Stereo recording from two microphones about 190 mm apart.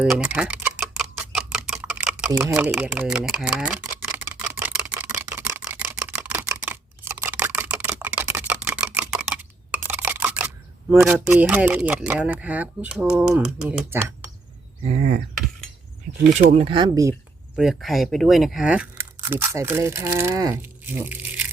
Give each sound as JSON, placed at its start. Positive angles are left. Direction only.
{"t": 0.0, "sound": "a sound", "side_deg": -5}
{"t": 5.3, "sound": "camera", "side_deg": -10}
{"t": 13.4, "sound": "speech", "side_deg": -5}
{"t": 14.8, "sound": "a sound", "side_deg": -40}
{"t": 16.4, "sound": "speech", "side_deg": -35}
{"t": 17.6, "sound": "speech", "side_deg": 0}